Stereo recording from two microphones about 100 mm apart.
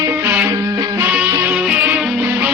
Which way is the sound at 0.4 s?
35° right (ahead or behind).